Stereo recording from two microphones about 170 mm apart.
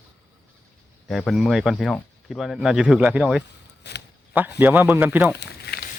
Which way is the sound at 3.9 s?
80° left.